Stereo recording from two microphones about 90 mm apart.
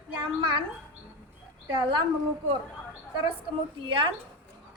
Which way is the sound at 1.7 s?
60° right (ahead or behind).